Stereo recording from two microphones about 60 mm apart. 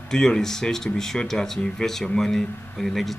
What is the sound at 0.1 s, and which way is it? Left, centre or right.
Speech, centre.